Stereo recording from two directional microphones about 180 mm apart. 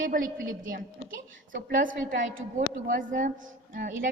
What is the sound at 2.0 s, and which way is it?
A woman's voice, 50° right (ahead or behind).